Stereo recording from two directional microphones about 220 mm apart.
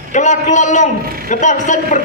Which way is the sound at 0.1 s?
35° left (ahead or behind).